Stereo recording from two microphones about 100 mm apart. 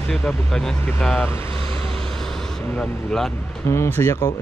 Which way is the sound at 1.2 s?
25° left (ahead or behind).